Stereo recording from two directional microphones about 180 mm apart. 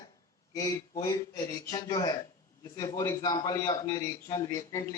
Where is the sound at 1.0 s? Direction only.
20° left (ahead or behind).